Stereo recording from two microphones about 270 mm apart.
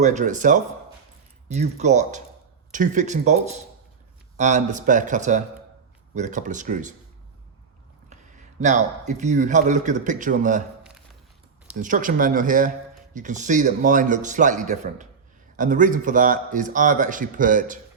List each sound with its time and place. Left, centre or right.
0.0 s a man's voice: right
8.6 s a man's voice: right
11.8 s a man's voice: right